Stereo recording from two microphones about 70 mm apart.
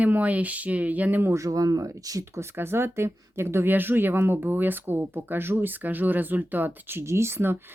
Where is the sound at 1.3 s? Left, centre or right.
Right.